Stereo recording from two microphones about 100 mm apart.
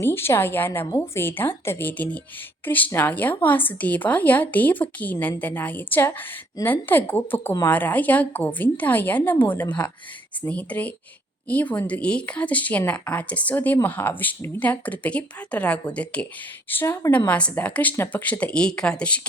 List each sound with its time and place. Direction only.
0.0 s a woman's voice: 25° left (ahead or behind)
16.6 s a woman's voice: 25° left (ahead or behind)
17.1 s speech: 15° left (ahead or behind)